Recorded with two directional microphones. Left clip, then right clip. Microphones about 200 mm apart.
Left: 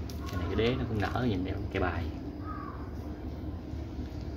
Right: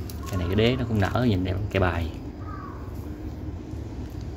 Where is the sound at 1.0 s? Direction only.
50° right (ahead or behind).